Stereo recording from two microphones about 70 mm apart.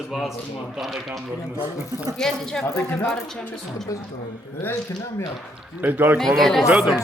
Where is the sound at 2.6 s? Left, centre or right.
Left.